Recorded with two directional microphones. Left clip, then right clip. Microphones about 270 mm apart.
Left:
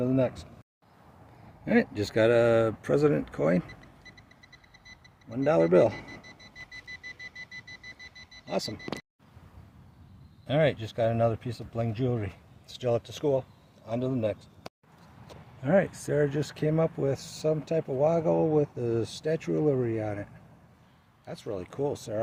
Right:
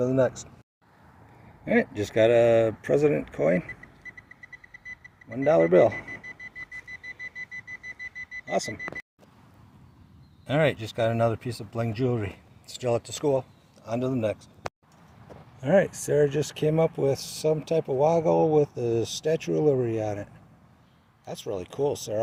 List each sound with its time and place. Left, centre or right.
0.0 s speech: centre
1.6 s speech: centre
5.3 s speech: centre
5.9 s speech: right
6.9 s music: centre
10.4 s speech: centre
15.6 s speech: centre
21.4 s speech: centre